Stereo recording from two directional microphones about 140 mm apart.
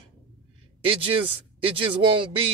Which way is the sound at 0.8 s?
40° right (ahead or behind).